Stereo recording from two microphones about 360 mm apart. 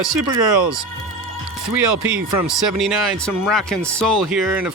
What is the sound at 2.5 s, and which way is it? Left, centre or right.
Speech, centre.